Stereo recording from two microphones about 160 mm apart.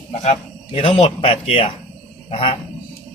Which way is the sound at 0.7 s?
35° left (ahead or behind).